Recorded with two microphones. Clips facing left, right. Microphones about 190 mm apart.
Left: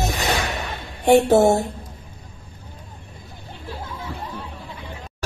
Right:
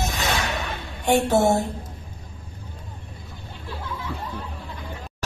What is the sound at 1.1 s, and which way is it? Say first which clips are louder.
Speech: left 5 dB; 35° left (ahead or behind).